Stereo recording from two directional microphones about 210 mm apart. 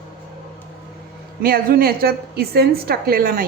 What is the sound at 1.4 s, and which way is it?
A woman's voice, 45° right (ahead or behind).